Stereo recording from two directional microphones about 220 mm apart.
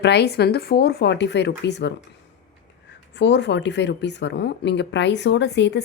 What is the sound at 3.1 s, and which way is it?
A woman's voice, 50° left (ahead or behind).